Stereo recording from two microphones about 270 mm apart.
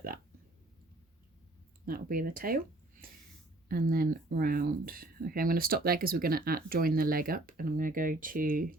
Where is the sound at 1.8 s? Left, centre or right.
Right.